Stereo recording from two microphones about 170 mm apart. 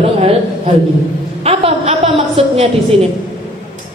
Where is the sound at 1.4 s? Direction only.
35° right (ahead or behind).